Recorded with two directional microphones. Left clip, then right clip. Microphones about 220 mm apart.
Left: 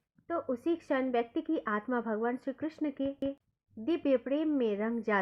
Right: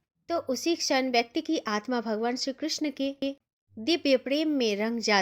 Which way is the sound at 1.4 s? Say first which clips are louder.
Right 4 dB; 35° right (ahead or behind).